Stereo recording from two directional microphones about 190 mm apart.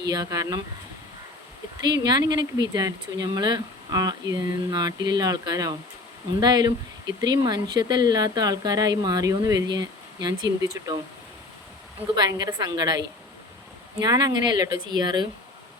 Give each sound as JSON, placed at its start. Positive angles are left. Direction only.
{"t": 0.1, "sound": "speech", "side_deg": -20}
{"t": 2.0, "sound": "speech", "side_deg": -20}
{"t": 12.1, "sound": "speech", "side_deg": -20}
{"t": 14.0, "sound": "speech", "side_deg": -20}